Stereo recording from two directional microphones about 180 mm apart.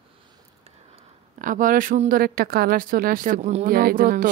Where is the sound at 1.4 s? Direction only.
50° right (ahead or behind).